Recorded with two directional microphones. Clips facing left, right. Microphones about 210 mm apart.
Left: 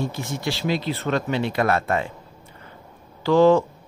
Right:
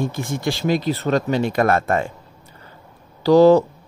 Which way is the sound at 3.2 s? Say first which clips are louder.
Right 4 dB; 40° right (ahead or behind).